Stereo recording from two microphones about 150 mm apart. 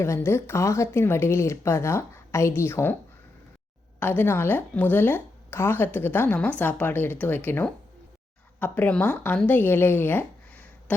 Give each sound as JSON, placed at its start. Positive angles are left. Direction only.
{"t": 0.0, "sound": "speech", "side_deg": 20}
{"t": 4.0, "sound": "speech", "side_deg": 15}